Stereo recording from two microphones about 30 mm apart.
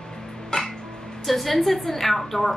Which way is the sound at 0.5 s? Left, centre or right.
Left.